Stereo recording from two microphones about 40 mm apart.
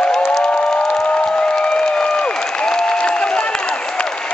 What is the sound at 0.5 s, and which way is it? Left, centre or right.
Applause, left.